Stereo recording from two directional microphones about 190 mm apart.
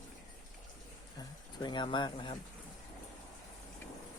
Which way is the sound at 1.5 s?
25° left (ahead or behind).